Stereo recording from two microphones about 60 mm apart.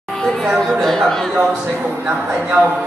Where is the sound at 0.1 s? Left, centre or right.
Centre.